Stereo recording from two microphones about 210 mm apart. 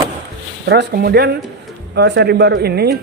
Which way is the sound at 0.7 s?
50° right (ahead or behind).